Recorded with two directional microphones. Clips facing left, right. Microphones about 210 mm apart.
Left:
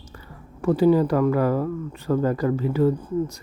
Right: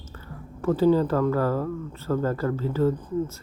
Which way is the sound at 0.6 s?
10° left (ahead or behind).